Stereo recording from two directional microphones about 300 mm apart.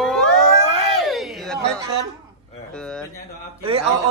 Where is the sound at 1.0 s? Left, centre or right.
Centre.